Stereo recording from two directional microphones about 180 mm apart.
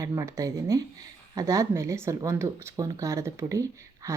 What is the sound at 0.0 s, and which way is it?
Speech, 20° right (ahead or behind).